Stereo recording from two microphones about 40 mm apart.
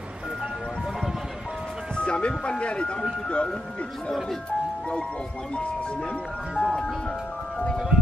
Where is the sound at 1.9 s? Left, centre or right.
Left.